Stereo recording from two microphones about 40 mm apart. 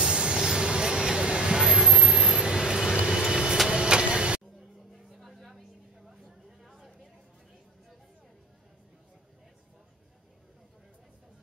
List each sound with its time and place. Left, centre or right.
0.0 s train: right
0.4 s vehicle: centre
3.7 s printer: right
4.6 s a sound: centre